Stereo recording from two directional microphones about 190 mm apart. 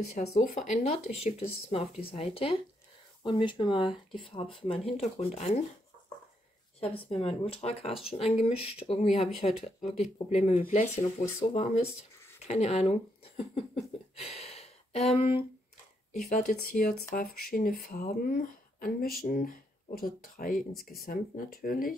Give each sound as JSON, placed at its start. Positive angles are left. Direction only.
{"t": 0.1, "sound": "speech", "side_deg": 35}
{"t": 6.8, "sound": "speech", "side_deg": 30}